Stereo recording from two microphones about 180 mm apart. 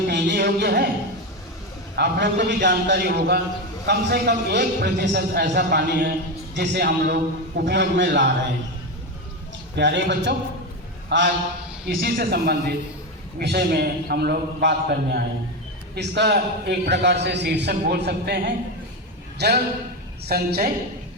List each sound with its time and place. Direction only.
0.1 s a sound: 70° right (ahead or behind)
2.0 s a man's voice: 70° right (ahead or behind)
9.7 s a man's voice: 75° right (ahead or behind)
12.0 s a man's voice: 60° right (ahead or behind)